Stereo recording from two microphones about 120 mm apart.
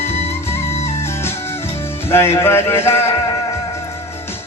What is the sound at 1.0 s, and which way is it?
Music, 20° left (ahead or behind).